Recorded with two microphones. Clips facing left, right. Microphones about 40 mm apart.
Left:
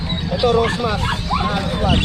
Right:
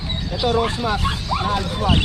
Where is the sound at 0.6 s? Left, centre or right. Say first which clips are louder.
Left 2 dB; centre.